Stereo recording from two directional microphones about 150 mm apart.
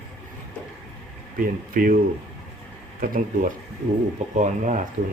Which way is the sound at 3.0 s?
65° right (ahead or behind).